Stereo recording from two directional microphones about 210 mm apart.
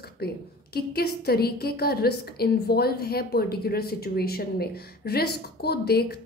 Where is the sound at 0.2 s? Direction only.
45° left (ahead or behind).